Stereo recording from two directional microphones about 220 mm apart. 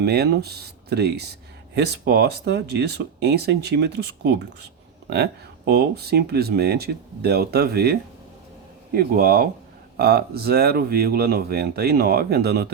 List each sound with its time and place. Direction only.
0.0 s speech: 50° right (ahead or behind)
9.0 s speech: 45° right (ahead or behind)